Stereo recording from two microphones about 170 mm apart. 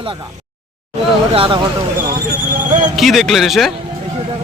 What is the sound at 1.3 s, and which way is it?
Speech, 30° right (ahead or behind).